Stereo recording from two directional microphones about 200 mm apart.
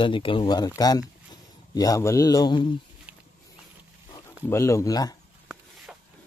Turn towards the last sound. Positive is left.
turn(degrees=15)  # may be behind; listen again after turning